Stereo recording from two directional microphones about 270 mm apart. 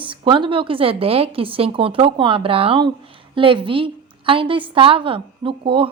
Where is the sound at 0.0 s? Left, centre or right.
Centre.